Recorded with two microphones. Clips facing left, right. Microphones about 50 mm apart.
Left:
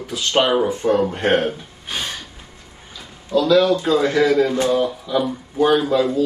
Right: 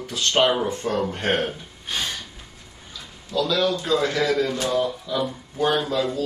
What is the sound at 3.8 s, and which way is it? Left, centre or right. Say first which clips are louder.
Speech: left 5 dB; centre.